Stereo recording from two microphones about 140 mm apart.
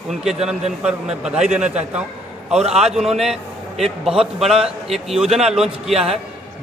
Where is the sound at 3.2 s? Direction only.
Centre (ahead or behind).